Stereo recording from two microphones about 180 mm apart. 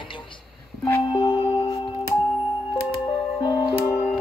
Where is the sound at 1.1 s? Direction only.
30° left (ahead or behind).